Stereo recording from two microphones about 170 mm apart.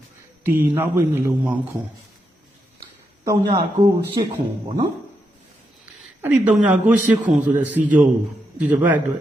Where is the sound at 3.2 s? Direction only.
20° right (ahead or behind).